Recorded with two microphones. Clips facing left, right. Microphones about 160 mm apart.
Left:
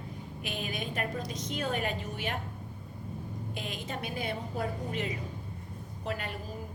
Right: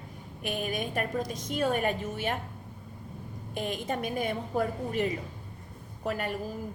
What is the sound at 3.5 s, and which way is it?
A woman's voice, 50° right (ahead or behind).